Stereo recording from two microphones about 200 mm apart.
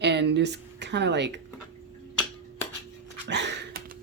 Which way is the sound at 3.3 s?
60° right (ahead or behind).